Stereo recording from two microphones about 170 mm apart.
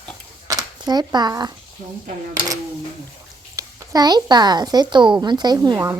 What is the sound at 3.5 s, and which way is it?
A woman's voice, 20° right (ahead or behind).